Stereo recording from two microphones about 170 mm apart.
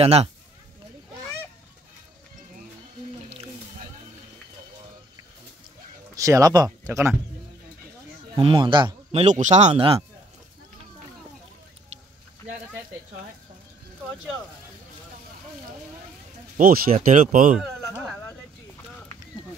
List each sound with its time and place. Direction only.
0.0 s speech: 40° right (ahead or behind)
6.1 s speech: 20° right (ahead or behind)
8.4 s speech: 30° right (ahead or behind)
9.2 s speech: 45° right (ahead or behind)
16.5 s speech: 60° right (ahead or behind)
17.6 s a sound: 5° right (ahead or behind)